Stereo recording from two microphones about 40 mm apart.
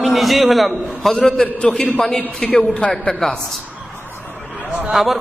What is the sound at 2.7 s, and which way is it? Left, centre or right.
Speech, left.